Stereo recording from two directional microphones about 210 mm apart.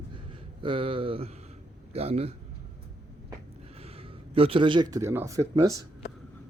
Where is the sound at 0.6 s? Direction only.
25° right (ahead or behind).